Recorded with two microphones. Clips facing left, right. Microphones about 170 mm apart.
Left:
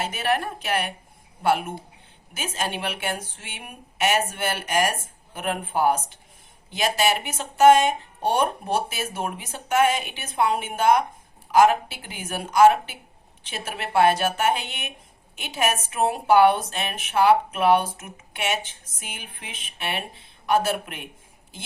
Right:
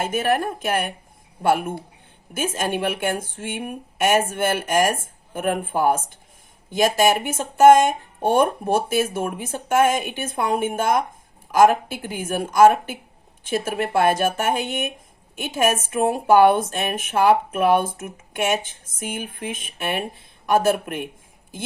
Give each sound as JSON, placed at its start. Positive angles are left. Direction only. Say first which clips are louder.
{"t": 0.0, "sound": "a woman's voice", "louder": "right 4 dB", "side_deg": -50}